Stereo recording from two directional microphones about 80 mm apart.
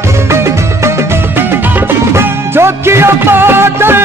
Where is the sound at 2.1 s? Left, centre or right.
Right.